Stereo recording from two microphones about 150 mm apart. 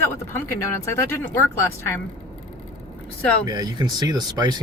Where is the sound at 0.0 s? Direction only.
15° left (ahead or behind).